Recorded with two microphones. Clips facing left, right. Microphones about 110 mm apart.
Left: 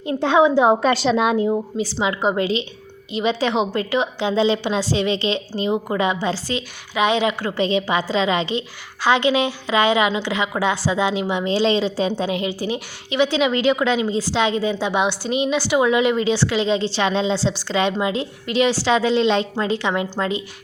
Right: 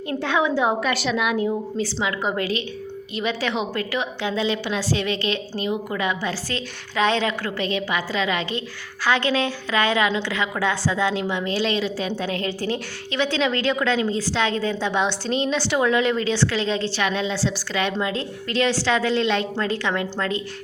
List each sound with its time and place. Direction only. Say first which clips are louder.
0.0 s a woman's voice: left 6 dB; 25° left (ahead or behind)